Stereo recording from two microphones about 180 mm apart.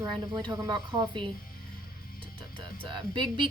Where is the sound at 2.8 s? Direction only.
25° right (ahead or behind).